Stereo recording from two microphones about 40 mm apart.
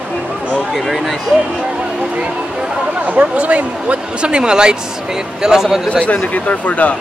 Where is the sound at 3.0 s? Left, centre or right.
Right.